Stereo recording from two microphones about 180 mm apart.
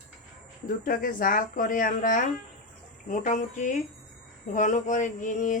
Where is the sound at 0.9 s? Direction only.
50° left (ahead or behind).